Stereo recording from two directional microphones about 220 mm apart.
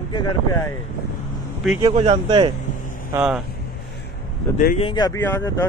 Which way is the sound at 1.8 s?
25° right (ahead or behind).